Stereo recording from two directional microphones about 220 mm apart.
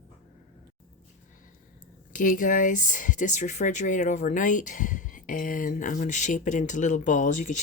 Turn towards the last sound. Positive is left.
turn(degrees=35)  # may be behind; listen again after turning